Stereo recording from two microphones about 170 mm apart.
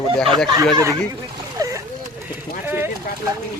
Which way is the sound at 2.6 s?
10° right (ahead or behind).